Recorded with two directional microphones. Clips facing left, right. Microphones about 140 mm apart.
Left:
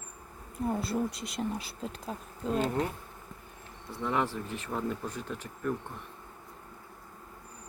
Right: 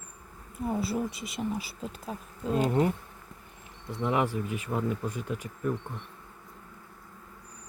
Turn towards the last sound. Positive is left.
turn(degrees=-5)  # may be behind; listen again after turning